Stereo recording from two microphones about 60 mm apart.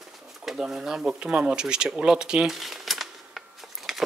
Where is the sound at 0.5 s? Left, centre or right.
Centre.